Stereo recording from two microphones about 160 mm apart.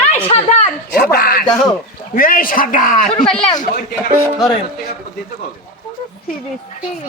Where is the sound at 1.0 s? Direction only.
70° left (ahead or behind).